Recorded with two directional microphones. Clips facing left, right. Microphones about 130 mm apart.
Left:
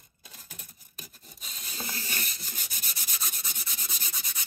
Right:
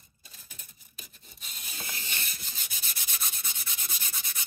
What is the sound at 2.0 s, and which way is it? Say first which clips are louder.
Rub: left 3 dB; 40° left (ahead or behind).